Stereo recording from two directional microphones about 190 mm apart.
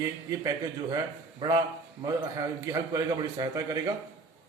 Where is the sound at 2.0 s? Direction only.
20° right (ahead or behind).